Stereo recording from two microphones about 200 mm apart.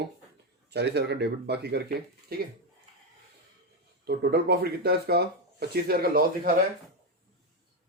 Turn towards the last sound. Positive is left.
turn(degrees=-45)  # may be behind; listen again after turning